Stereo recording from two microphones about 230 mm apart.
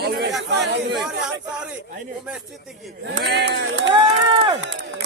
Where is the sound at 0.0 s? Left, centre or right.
Right.